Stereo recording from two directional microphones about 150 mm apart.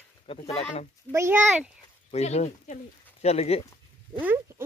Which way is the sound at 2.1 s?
45° left (ahead or behind).